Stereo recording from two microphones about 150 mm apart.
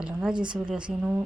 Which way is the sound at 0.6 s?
5° right (ahead or behind).